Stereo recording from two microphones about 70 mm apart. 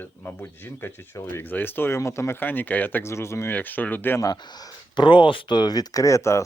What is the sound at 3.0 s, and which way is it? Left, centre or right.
Speech, left.